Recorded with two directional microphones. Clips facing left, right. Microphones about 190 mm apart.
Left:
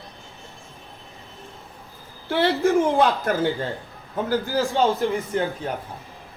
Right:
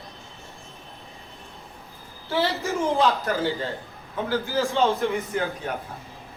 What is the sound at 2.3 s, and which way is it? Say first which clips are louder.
A man's voice: left 6 dB; 55° left (ahead or behind).